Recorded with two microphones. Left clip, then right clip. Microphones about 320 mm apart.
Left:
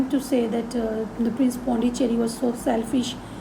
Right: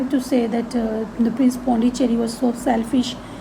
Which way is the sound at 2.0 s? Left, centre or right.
Centre.